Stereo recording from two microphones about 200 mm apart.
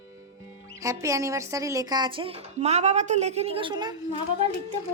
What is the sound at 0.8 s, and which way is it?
A woman's voice, 15° right (ahead or behind).